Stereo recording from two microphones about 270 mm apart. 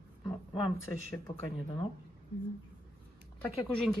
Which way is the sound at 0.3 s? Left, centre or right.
Centre.